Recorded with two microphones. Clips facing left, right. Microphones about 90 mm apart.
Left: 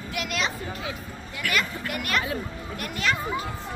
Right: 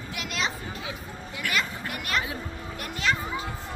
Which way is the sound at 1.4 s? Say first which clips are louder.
Left 2 dB; 20° right (ahead or behind).